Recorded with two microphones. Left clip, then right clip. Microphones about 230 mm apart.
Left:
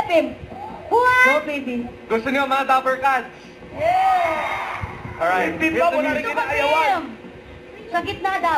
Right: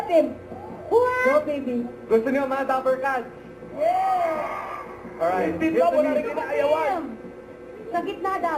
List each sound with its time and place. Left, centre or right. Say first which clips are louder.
0.9 s a child's voice: left 5 dB; centre